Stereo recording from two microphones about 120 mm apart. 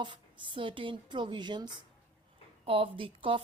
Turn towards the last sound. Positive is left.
turn(degrees=-50)  # may be behind; listen again after turning